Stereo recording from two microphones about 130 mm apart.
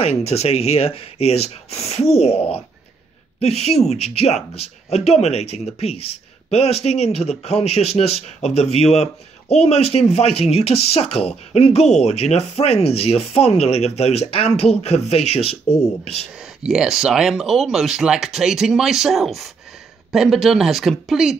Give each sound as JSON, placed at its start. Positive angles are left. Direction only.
{"t": 0.0, "sound": "speech", "side_deg": 50}
{"t": 16.3, "sound": "speech", "side_deg": -5}